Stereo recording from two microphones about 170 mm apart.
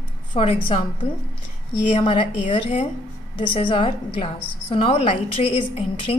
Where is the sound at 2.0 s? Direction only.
30° left (ahead or behind).